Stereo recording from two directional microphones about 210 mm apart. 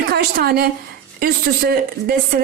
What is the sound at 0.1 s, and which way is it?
A woman's voice, 45° right (ahead or behind).